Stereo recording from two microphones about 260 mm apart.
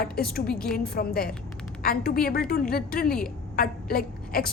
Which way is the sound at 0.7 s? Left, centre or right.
Left.